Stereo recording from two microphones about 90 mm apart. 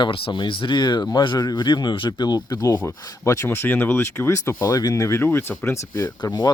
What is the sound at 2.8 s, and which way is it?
Speech, 30° left (ahead or behind).